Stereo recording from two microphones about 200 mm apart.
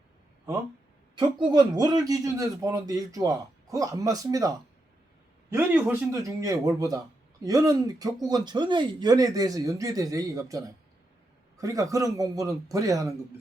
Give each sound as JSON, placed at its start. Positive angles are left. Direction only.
{"t": 1.5, "sound": "a man's voice", "side_deg": -20}